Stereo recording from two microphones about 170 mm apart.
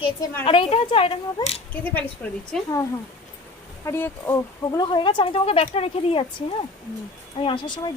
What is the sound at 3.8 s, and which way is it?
Speech, 15° left (ahead or behind).